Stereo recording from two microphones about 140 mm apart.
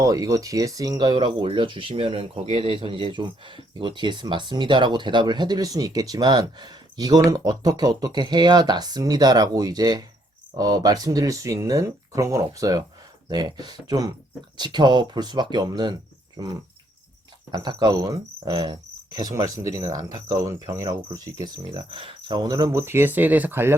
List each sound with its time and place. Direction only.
0.0 s speech: 25° right (ahead or behind)
10.6 s cricket: 25° right (ahead or behind)
14.5 s speech: 30° right (ahead or behind)
17.5 s cricket: 30° right (ahead or behind)